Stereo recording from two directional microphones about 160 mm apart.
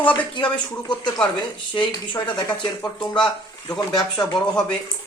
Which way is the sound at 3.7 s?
25° left (ahead or behind).